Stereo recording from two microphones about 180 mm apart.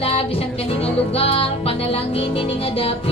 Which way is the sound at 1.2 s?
30° left (ahead or behind).